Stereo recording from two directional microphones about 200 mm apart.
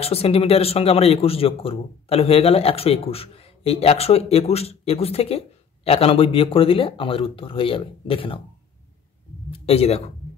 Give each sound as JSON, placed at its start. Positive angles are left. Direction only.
{"t": 0.0, "sound": "speech", "side_deg": 30}
{"t": 9.5, "sound": "speech", "side_deg": 30}